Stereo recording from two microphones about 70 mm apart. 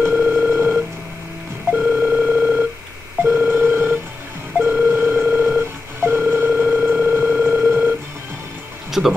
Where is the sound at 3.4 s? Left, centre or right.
Right.